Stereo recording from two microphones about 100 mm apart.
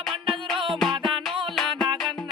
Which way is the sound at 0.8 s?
5° left (ahead or behind).